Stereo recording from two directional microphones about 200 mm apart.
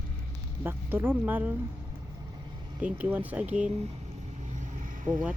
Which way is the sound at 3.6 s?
30° right (ahead or behind).